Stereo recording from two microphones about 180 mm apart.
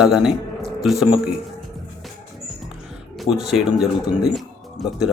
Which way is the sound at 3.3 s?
90° left.